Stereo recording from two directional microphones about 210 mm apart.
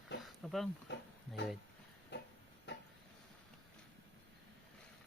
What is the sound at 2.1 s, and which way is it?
Tick-tock, 55° left (ahead or behind).